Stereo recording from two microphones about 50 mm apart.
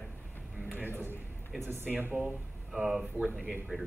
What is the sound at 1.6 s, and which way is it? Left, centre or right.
Speech, right.